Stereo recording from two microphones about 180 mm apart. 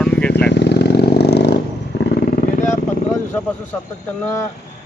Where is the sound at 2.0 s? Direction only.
50° left (ahead or behind).